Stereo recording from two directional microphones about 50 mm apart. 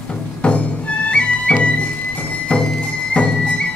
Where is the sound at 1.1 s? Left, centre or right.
Left.